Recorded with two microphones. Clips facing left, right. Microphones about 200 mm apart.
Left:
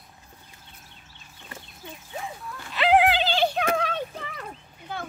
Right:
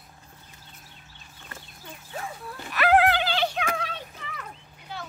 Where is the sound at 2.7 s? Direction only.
20° left (ahead or behind).